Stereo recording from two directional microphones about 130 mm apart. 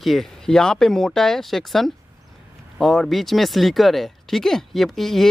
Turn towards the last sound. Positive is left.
turn(degrees=0)  # may be behind; listen again after turning